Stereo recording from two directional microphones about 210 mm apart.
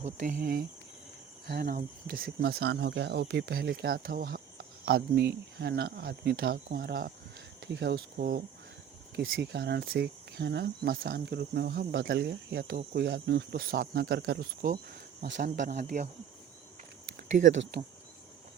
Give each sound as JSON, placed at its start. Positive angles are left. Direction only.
{"t": 0.0, "sound": "cricket", "side_deg": -40}
{"t": 1.5, "sound": "speech", "side_deg": -45}
{"t": 7.6, "sound": "speech", "side_deg": -55}
{"t": 9.1, "sound": "speech", "side_deg": -60}